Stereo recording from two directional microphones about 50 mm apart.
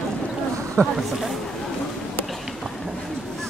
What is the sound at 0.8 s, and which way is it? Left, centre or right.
Speech, right.